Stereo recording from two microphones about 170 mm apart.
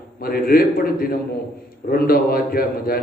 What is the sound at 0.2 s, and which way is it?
A man's voice, 60° left (ahead or behind).